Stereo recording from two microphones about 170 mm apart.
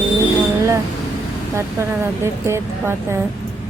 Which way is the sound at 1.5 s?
15° right (ahead or behind).